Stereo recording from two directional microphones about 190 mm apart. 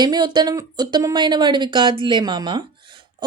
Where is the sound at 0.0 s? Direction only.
20° right (ahead or behind).